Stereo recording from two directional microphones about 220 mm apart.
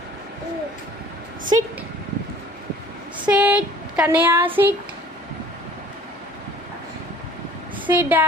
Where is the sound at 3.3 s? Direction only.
5° right (ahead or behind).